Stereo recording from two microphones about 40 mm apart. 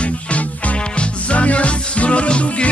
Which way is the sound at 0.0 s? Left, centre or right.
Left.